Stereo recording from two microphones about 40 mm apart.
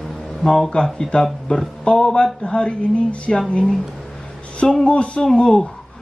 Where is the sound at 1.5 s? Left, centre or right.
Left.